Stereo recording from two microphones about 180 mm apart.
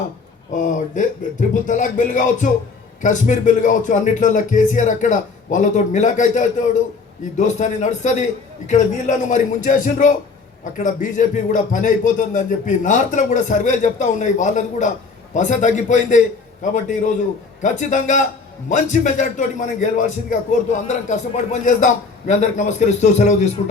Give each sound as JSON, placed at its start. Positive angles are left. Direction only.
{"t": 0.5, "sound": "a man's voice", "side_deg": 45}